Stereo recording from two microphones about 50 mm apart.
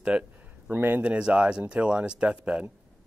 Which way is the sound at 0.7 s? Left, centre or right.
Right.